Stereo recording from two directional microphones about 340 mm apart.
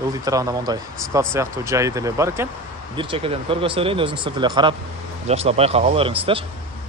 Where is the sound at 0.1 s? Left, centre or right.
Centre.